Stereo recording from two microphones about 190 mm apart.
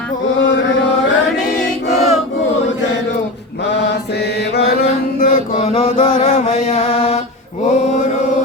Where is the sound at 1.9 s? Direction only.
35° left (ahead or behind).